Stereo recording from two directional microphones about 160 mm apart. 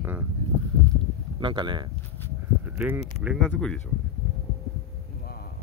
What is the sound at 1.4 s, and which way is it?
Speech, 30° right (ahead or behind).